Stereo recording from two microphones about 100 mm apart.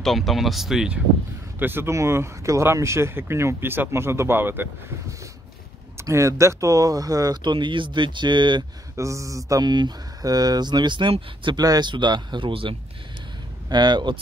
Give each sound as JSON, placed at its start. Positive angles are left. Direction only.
{"t": 0.0, "sound": "speech", "side_deg": 0}
{"t": 1.6, "sound": "speech", "side_deg": -20}
{"t": 5.9, "sound": "speech", "side_deg": -30}
{"t": 8.9, "sound": "speech", "side_deg": -30}
{"t": 9.5, "sound": "speech", "side_deg": -45}
{"t": 11.6, "sound": "speech", "side_deg": -40}
{"t": 11.9, "sound": "speech", "side_deg": -50}